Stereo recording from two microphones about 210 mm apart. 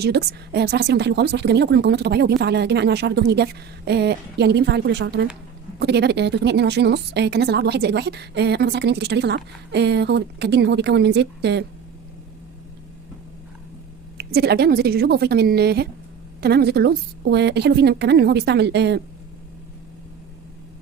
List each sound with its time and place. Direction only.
0.0 s a woman's voice: 50° right (ahead or behind)
14.2 s a woman's voice: 50° right (ahead or behind)